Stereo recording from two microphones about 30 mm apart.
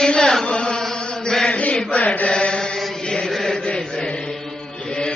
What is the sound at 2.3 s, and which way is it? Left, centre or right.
Chant, left.